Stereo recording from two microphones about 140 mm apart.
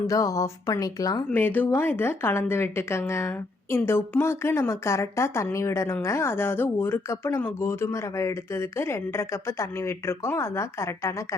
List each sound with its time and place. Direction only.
0.1 s speech: 25° left (ahead or behind)
1.3 s speech: 15° left (ahead or behind)